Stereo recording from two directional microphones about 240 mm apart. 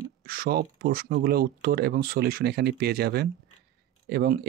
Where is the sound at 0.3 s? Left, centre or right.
Right.